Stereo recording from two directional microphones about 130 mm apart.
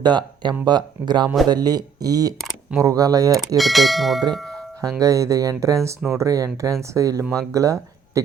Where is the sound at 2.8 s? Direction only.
30° right (ahead or behind).